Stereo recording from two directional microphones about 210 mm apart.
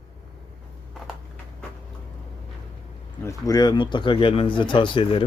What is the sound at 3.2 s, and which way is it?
Speech, 15° left (ahead or behind).